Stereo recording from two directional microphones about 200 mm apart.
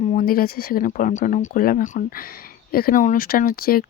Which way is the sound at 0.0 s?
35° left (ahead or behind).